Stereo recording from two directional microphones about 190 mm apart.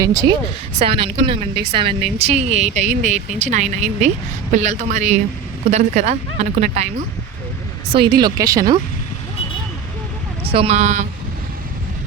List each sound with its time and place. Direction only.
0.0 s speech: 20° right (ahead or behind)
0.8 s a woman's voice: 30° right (ahead or behind)
7.9 s speech: 25° right (ahead or behind)
10.4 s a woman's voice: 30° right (ahead or behind)